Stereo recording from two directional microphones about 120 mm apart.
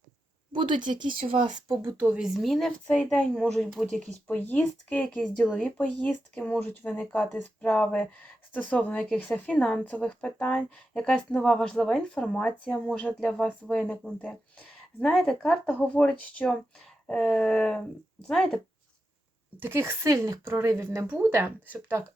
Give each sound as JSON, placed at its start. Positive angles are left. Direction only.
{"t": 0.5, "sound": "speech", "side_deg": -40}
{"t": 2.0, "sound": "a woman's voice", "side_deg": -10}
{"t": 4.4, "sound": "a woman's voice", "side_deg": 15}
{"t": 19.5, "sound": "speech", "side_deg": -20}